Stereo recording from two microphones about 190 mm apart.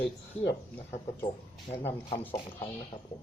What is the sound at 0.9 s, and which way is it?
Speech, 30° left (ahead or behind).